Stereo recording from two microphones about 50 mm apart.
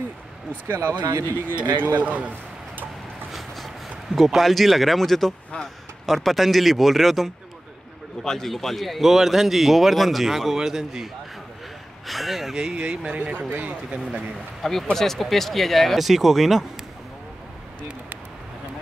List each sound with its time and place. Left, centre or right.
0.7 s speech: right
2.0 s speech: right
3.3 s a sound: centre
6.0 s speech: centre
12.1 s speech: centre
12.5 s speech: centre; by 14.0 s right
14.6 s speech: centre